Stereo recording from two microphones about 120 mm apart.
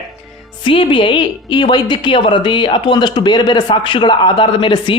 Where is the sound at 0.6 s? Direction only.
45° left (ahead or behind).